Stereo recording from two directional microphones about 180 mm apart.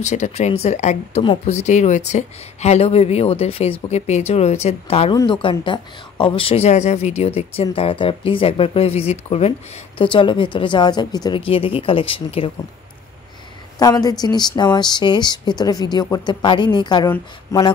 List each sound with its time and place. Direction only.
0.0 s a woman's voice: 40° left (ahead or behind)
13.7 s a woman's voice: 20° left (ahead or behind)